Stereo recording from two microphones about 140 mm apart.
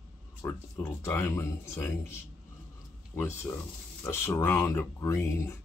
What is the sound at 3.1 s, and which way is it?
Speech, 15° left (ahead or behind).